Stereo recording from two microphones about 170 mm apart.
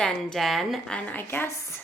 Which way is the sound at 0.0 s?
5° left (ahead or behind).